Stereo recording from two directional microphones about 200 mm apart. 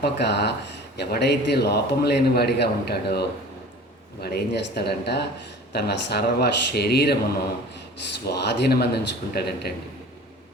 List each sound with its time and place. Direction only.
0.0 s a man's voice: 55° left (ahead or behind)
8.2 s a man's voice: 55° left (ahead or behind)